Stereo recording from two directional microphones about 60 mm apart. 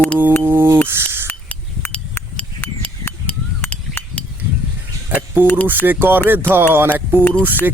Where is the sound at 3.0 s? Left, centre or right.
Left.